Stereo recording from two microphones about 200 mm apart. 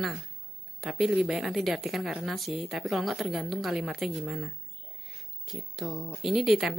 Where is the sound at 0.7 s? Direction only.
Centre (ahead or behind).